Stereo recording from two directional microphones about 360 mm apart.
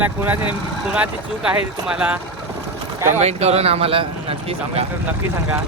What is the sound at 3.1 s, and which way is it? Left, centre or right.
Speech, centre.